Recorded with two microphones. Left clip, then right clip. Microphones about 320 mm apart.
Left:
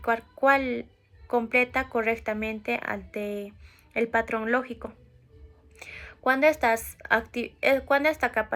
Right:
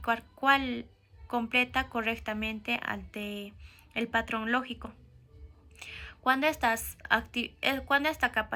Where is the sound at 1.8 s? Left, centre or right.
Centre.